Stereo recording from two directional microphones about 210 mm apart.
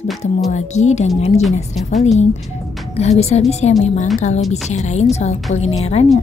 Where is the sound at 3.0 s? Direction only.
30° left (ahead or behind).